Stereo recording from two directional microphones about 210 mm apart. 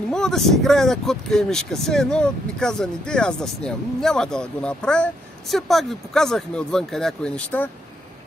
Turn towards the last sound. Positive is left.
turn(degrees=5)  # may be behind; listen again after turning